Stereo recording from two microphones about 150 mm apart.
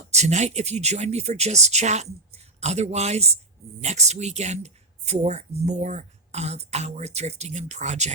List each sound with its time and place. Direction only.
0.1 s speech: 50° right (ahead or behind)